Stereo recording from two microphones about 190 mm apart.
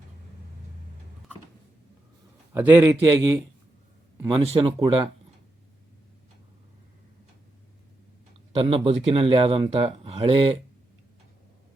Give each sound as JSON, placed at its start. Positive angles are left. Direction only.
{"t": 2.5, "sound": "a man's voice", "side_deg": -10}
{"t": 4.3, "sound": "speech", "side_deg": -30}
{"t": 8.5, "sound": "speech", "side_deg": -30}